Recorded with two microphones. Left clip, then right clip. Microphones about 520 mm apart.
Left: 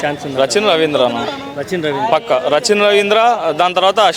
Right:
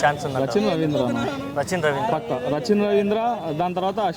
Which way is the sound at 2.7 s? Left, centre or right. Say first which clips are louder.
Left 9 dB; centre.